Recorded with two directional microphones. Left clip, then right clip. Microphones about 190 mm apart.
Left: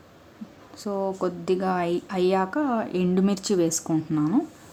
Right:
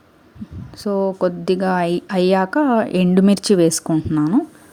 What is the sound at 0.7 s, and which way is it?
Speech, 30° right (ahead or behind).